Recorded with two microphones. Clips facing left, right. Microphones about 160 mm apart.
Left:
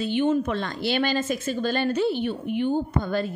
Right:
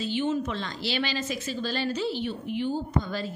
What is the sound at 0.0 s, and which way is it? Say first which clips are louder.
A woman's voice: left 5 dB; 55° left (ahead or behind).